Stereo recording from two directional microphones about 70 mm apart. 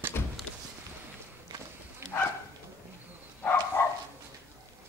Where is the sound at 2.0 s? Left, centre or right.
Right.